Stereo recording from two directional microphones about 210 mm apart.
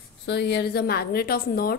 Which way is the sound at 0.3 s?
55° left (ahead or behind).